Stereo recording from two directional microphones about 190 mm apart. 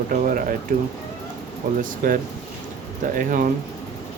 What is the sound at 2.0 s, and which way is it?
Speech, 50° right (ahead or behind).